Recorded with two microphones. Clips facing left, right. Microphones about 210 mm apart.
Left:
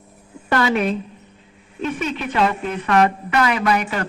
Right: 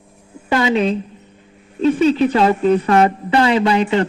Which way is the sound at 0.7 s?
25° right (ahead or behind).